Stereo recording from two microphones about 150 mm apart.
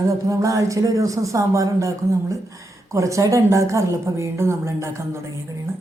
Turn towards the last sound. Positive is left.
turn(degrees=-20)  # may be behind; listen again after turning